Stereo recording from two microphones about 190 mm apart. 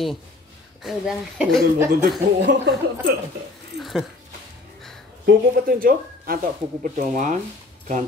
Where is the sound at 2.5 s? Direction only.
60° right (ahead or behind).